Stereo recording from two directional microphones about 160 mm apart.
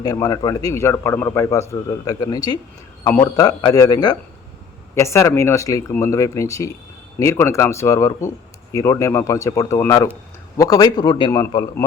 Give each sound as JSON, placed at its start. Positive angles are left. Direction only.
{"t": 0.0, "sound": "a man's voice", "side_deg": 25}